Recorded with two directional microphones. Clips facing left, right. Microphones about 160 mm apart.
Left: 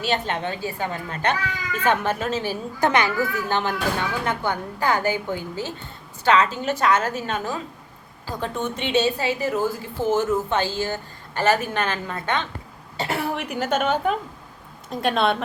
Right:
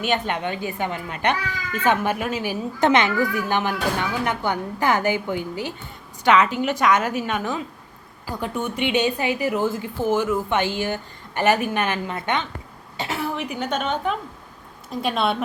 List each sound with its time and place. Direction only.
0.1 s a woman's voice: 15° right (ahead or behind)
13.0 s a woman's voice: centre (ahead or behind)